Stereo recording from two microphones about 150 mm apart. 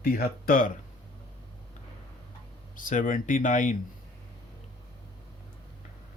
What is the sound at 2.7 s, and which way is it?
Speech, 60° left (ahead or behind).